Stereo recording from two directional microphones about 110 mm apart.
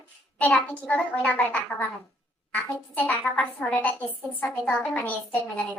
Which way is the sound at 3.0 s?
15° left (ahead or behind).